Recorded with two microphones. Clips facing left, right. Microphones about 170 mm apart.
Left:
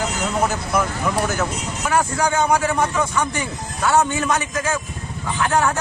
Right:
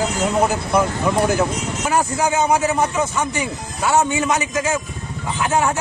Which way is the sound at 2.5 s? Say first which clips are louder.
Right 1 dB; 20° right (ahead or behind).